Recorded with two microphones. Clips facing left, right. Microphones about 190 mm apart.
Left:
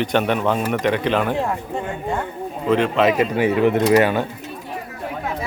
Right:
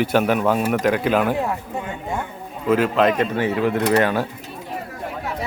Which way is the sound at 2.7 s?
5° right (ahead or behind).